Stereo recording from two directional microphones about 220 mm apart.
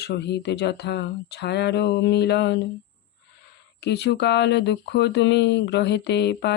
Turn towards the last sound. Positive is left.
turn(degrees=50)  # may be behind; listen again after turning